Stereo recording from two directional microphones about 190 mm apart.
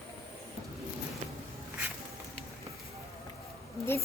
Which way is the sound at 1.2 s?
40° right (ahead or behind).